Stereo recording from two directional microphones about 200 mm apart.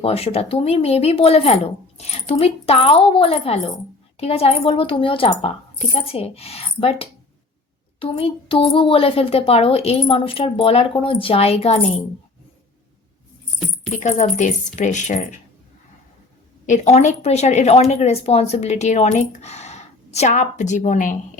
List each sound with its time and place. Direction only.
0.0 s a child's voice: 30° left (ahead or behind)
14.0 s speech: 35° left (ahead or behind)
16.6 s speech: 35° left (ahead or behind)